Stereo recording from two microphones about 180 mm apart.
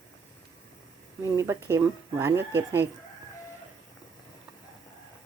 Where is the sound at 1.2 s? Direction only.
15° right (ahead or behind).